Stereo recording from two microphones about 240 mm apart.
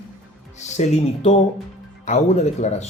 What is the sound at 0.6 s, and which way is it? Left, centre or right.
Speech, left.